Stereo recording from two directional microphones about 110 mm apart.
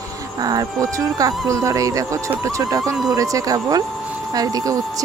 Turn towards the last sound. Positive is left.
turn(degrees=-35)  # may be behind; listen again after turning